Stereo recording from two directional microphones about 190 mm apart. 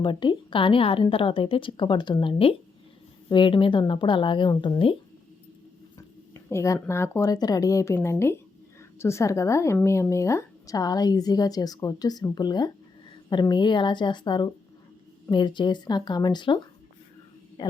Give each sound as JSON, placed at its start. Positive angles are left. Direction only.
{"t": 0.0, "sound": "a woman's voice", "side_deg": 25}
{"t": 6.5, "sound": "a woman's voice", "side_deg": 15}
{"t": 17.6, "sound": "a woman's voice", "side_deg": 20}